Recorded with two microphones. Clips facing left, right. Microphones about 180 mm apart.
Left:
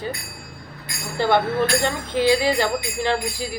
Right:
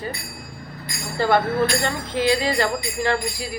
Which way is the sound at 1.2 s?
20° left (ahead or behind).